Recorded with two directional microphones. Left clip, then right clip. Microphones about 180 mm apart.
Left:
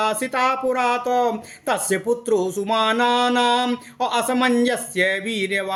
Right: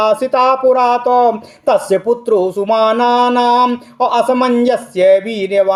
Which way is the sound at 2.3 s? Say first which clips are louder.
Right 8 dB; 10° right (ahead or behind).